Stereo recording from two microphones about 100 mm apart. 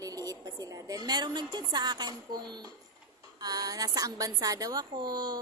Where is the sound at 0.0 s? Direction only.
40° right (ahead or behind).